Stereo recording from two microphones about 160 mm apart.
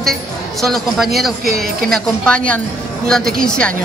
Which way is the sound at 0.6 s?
Centre (ahead or behind).